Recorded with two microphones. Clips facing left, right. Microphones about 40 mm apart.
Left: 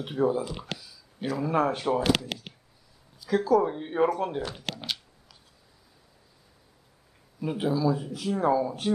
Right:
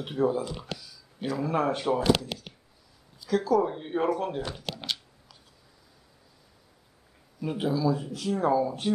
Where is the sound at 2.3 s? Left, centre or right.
Left.